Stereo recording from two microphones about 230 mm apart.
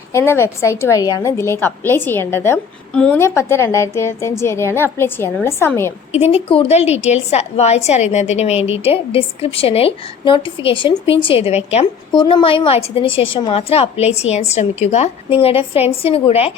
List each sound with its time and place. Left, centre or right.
0.1 s a woman's voice: centre
6.1 s a woman's voice: left